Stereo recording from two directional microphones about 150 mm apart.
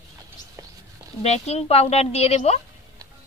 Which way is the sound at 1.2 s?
45° left (ahead or behind).